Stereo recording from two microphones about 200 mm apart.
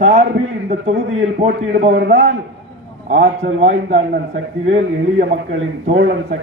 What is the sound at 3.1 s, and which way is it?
A man's voice, 40° right (ahead or behind).